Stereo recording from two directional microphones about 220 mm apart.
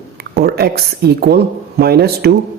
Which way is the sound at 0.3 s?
45° right (ahead or behind).